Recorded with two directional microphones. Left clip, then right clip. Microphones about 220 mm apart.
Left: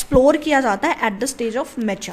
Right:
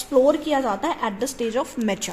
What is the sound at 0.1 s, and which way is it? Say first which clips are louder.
A woman's voice: left 4 dB; 30° left (ahead or behind).